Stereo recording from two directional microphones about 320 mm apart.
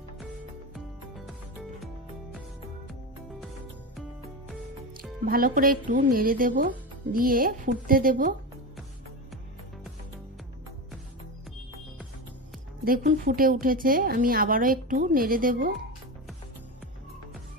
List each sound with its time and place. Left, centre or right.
0.7 s music: centre
5.2 s a woman's voice: right
12.8 s a woman's voice: right